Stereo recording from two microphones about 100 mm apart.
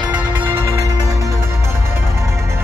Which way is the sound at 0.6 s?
35° right (ahead or behind).